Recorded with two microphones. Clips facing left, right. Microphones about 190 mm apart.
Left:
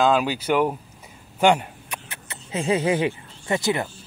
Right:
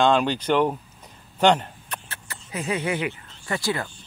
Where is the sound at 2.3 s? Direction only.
25° left (ahead or behind).